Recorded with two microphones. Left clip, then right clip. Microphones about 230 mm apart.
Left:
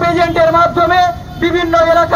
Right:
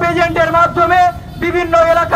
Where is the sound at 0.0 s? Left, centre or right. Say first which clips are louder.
Left 2 dB; right.